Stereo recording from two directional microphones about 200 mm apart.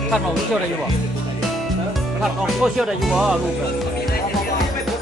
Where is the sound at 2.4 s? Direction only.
Centre (ahead or behind).